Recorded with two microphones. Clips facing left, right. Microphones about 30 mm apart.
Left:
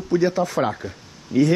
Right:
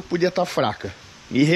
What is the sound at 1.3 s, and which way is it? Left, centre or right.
Speech, right.